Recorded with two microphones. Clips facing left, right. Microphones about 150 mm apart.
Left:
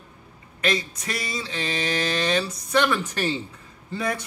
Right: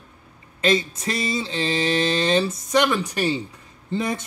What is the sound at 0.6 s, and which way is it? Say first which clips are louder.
Speech: right 5 dB; 25° right (ahead or behind).